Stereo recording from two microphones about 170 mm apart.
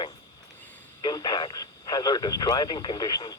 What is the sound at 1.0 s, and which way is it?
Speech, 25° left (ahead or behind).